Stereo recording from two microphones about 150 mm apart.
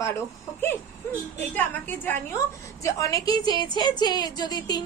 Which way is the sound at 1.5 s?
10° left (ahead or behind).